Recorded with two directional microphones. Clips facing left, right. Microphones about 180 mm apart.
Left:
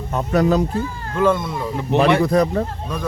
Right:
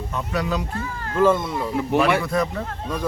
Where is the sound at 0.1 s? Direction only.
45° left (ahead or behind).